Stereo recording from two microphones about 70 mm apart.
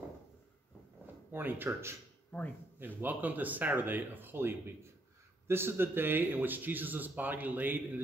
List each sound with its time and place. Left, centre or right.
1.3 s speech: right
3.0 s speech: right